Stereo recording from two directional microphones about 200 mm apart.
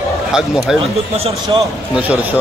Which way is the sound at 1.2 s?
30° right (ahead or behind).